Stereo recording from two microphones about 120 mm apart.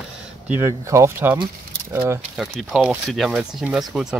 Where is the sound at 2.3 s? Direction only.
5° right (ahead or behind).